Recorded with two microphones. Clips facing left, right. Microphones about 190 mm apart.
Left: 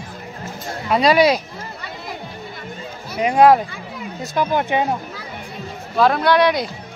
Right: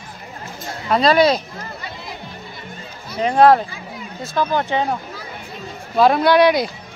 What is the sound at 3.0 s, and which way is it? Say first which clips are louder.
Speech: even; 10° left (ahead or behind).